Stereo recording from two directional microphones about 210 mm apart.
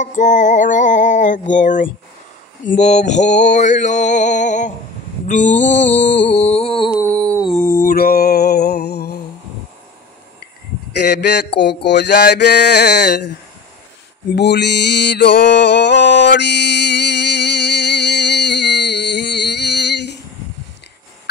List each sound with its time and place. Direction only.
0.0 s male singing: 35° left (ahead or behind)
6.2 s music: 30° left (ahead or behind)
7.0 s a sound: 5° left (ahead or behind)
7.5 s mantra: 40° left (ahead or behind)
11.1 s mantra: 50° left (ahead or behind)